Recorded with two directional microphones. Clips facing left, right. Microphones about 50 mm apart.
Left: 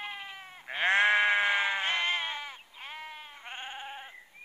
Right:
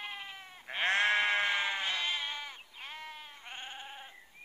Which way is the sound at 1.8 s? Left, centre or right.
Left.